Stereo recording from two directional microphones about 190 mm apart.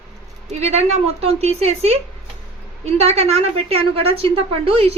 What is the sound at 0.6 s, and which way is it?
A woman's voice, 35° right (ahead or behind).